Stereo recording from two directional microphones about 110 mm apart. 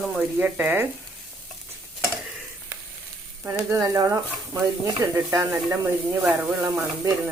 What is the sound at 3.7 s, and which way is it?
Speech, 25° right (ahead or behind).